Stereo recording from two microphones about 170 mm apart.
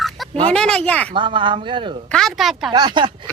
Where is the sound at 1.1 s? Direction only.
30° right (ahead or behind).